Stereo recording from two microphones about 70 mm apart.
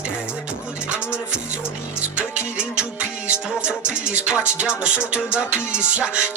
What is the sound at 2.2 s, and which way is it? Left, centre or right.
Music, centre.